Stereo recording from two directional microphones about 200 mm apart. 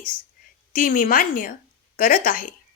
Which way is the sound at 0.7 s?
45° left (ahead or behind).